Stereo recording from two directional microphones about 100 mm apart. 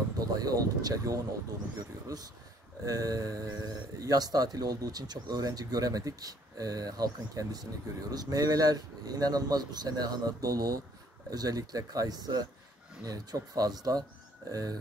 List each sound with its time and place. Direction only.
0.2 s speech: 40° right (ahead or behind)